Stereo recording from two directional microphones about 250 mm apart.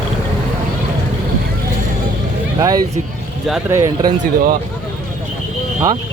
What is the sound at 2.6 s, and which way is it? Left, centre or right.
Speech, centre.